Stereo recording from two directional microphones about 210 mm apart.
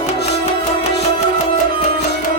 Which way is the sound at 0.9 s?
30° left (ahead or behind).